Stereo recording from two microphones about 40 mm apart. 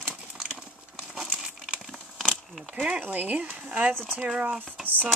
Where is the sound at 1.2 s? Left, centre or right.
Centre.